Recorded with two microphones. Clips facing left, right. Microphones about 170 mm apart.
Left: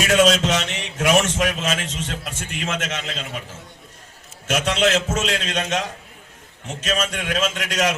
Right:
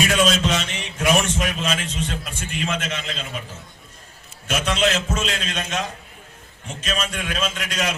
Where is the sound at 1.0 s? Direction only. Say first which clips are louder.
Left 2 dB; 75° left (ahead or behind).